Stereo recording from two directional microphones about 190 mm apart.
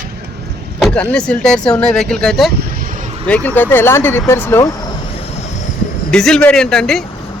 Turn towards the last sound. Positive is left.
turn(degrees=5)  # may be behind; listen again after turning